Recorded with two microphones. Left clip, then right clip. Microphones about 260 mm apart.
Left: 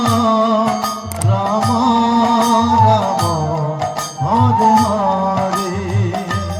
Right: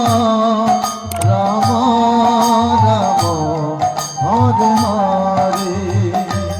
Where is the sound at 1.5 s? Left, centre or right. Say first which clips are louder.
Left 1 dB; right.